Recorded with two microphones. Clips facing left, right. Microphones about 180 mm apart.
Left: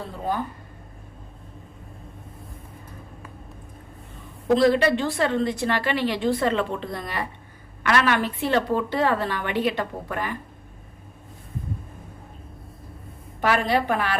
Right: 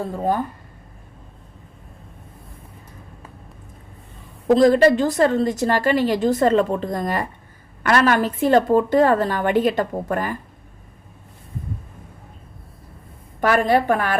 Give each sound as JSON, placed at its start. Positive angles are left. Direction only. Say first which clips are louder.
{"t": 4.5, "sound": "a woman's voice", "louder": "right 5 dB", "side_deg": -40}
{"t": 13.4, "sound": "a woman's voice", "louder": "right 5 dB", "side_deg": -45}